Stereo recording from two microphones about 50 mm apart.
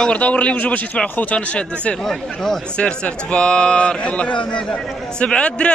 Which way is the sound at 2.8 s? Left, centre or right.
Left.